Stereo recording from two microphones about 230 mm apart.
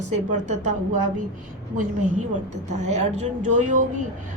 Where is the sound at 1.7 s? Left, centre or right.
Right.